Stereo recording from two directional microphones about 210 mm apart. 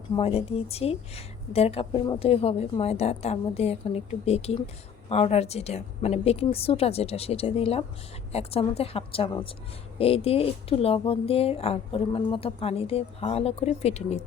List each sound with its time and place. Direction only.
0.2 s a woman's voice: 30° left (ahead or behind)